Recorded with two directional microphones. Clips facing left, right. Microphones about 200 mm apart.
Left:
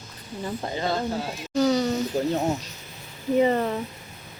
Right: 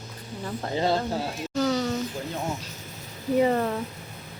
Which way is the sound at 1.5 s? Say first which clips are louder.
Left 4 dB; centre (ahead or behind).